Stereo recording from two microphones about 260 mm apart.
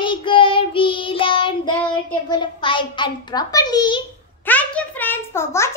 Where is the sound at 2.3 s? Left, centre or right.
Centre.